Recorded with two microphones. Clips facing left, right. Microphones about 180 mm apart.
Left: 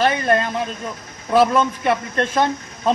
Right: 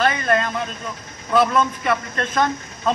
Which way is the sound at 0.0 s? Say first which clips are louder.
Left 2 dB; 30° left (ahead or behind).